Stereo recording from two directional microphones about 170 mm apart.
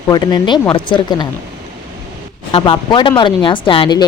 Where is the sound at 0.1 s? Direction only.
25° left (ahead or behind).